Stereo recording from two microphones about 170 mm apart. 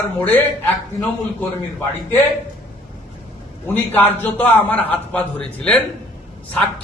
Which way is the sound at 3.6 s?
10° left (ahead or behind).